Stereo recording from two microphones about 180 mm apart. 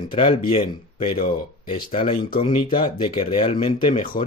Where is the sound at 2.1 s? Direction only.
55° left (ahead or behind).